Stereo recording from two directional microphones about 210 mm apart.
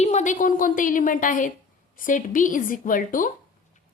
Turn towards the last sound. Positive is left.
turn(degrees=40)  # may be behind; listen again after turning